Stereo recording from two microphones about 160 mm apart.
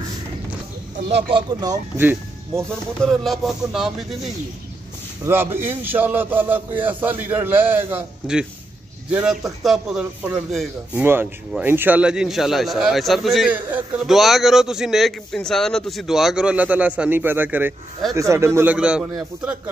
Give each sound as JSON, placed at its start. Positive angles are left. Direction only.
{"t": 1.3, "sound": "speech", "side_deg": -25}
{"t": 2.0, "sound": "speech", "side_deg": -15}
{"t": 3.0, "sound": "speech", "side_deg": 0}
{"t": 5.2, "sound": "a man's voice", "side_deg": -15}